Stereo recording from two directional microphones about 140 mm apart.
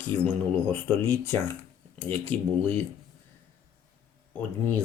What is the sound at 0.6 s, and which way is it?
Speech, 10° left (ahead or behind).